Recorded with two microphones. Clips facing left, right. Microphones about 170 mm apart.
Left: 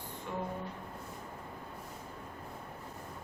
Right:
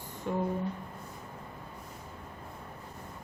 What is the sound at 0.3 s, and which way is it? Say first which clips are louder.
Speech: right 7 dB; 45° right (ahead or behind).